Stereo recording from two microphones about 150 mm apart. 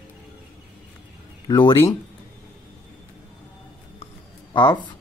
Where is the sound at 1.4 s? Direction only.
30° left (ahead or behind).